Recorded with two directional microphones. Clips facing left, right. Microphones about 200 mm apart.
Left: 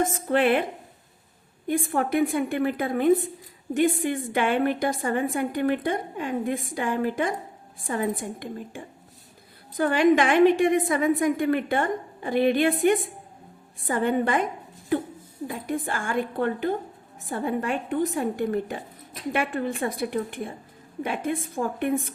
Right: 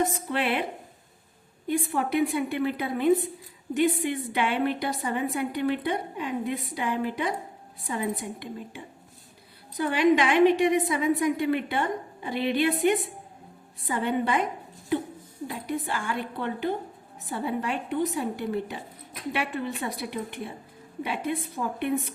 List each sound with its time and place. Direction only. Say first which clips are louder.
0.0 s a woman's voice: left 5 dB; 50° left (ahead or behind)
1.6 s a woman's voice: left 2 dB; 50° left (ahead or behind)
15.6 s a woman's voice: left 1 dB; 50° left (ahead or behind)